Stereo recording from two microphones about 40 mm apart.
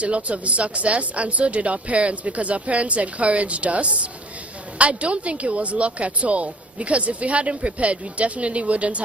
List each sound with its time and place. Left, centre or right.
0.0 s speech: right